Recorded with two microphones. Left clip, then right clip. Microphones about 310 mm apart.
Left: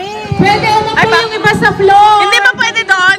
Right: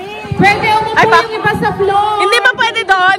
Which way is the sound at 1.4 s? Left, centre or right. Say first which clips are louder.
Left 4 dB; left.